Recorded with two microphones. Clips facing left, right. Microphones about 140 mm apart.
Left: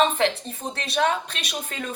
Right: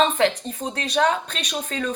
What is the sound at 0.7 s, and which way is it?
Speech, 40° right (ahead or behind).